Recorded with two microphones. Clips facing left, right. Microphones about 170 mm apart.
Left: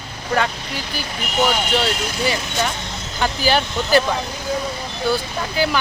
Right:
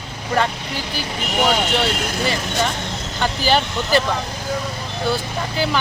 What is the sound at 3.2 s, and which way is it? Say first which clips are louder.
Speech: even; 5° left (ahead or behind).